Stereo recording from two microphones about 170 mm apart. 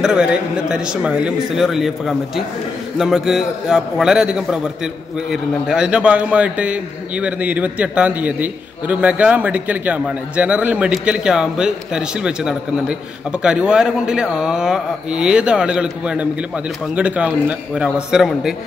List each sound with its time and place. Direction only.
0.0 s a man's voice: 5° right (ahead or behind)